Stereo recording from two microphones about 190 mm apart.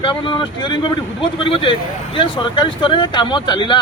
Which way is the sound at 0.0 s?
25° left (ahead or behind).